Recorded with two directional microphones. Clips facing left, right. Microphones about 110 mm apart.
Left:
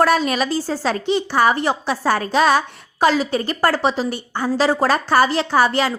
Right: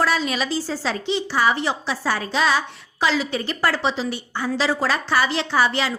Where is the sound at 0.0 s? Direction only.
50° left (ahead or behind).